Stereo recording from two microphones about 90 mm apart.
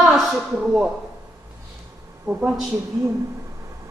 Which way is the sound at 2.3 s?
15° right (ahead or behind).